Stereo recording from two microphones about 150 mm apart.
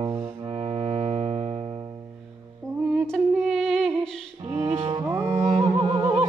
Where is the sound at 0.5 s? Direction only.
40° right (ahead or behind).